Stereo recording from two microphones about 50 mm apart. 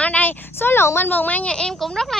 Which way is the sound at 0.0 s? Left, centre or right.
Left.